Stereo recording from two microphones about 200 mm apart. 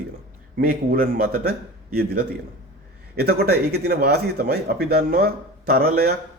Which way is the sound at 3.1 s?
50° right (ahead or behind).